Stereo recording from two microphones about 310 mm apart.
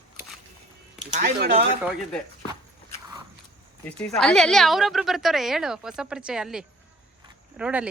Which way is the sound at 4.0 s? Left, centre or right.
Centre.